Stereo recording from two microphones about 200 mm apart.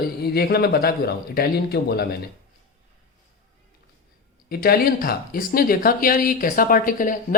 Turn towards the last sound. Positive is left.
turn(degrees=45)  # may be behind; listen again after turning